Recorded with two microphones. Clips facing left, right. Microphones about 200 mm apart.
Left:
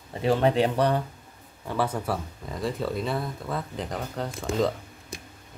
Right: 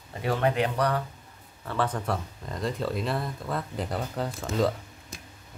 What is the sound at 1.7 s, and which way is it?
Speech, 10° left (ahead or behind).